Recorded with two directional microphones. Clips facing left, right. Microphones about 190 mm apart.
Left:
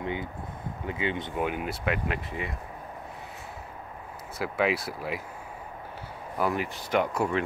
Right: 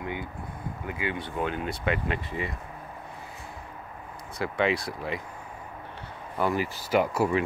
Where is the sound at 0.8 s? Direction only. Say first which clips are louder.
Left 2 dB; 25° left (ahead or behind); by 2.5 s centre (ahead or behind).